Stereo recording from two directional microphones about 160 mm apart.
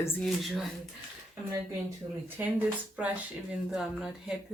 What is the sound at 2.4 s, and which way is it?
Speech, 10° right (ahead or behind).